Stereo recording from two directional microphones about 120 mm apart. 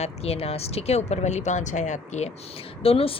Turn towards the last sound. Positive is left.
turn(degrees=50)  # may be behind; listen again after turning